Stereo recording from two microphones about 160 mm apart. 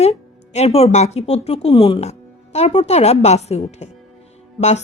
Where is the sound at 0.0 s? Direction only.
40° left (ahead or behind).